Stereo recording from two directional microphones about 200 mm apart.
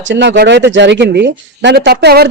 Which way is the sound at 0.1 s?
60° right (ahead or behind).